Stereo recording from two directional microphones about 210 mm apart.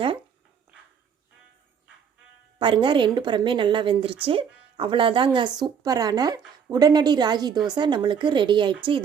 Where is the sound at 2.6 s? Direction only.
25° right (ahead or behind).